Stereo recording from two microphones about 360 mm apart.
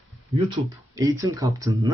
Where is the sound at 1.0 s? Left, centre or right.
Centre.